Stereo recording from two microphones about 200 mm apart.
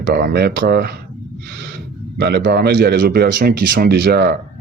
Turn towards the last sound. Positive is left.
turn(degrees=-50)  # may be behind; listen again after turning